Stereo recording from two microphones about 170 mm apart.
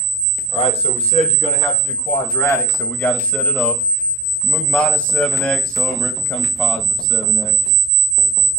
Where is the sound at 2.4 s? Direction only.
15° left (ahead or behind).